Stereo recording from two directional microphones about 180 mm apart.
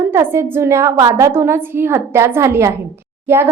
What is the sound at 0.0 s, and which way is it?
A woman's voice, 15° right (ahead or behind).